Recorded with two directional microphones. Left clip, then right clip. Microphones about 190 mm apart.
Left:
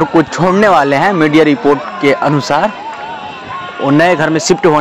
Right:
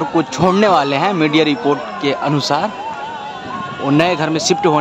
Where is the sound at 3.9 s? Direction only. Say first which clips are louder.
Left 5 dB; 15° left (ahead or behind).